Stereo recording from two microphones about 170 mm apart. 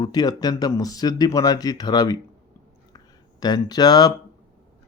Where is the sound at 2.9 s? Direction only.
25° left (ahead or behind).